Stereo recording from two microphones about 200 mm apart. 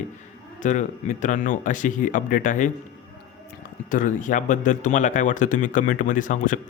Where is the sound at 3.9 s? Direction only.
40° left (ahead or behind).